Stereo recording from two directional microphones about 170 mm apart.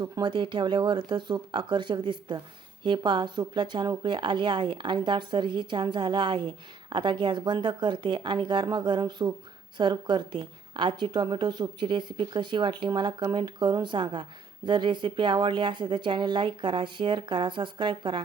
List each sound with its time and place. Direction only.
0.0 s a woman's voice: 25° right (ahead or behind)